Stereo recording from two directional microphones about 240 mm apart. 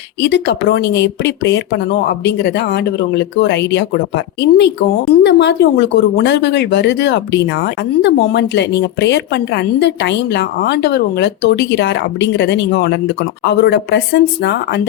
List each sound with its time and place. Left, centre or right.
0.2 s speech: left